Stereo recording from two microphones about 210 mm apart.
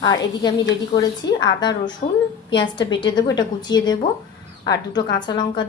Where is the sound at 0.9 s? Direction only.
20° left (ahead or behind).